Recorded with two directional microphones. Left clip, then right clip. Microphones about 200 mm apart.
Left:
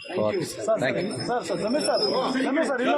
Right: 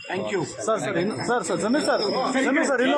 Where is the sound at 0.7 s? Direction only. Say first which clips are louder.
Even; 45° right (ahead or behind).